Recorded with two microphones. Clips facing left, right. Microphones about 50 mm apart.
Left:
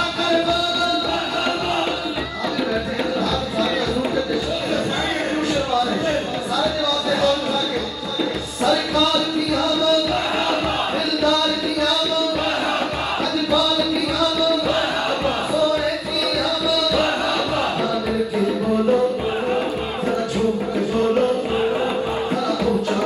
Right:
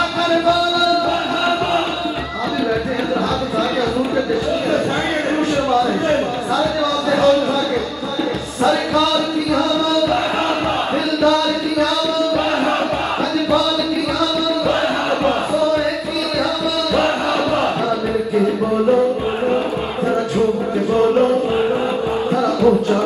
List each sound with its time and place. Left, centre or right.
0.3 s music: right
5.7 s a sound: right
8.6 s music: right
11.1 s music: right
14.2 s music: right
22.3 s music: right